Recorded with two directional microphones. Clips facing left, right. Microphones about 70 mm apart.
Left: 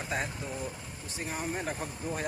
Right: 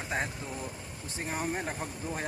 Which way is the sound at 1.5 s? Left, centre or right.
Right.